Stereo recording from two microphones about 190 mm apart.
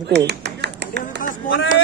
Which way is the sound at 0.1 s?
65° right (ahead or behind).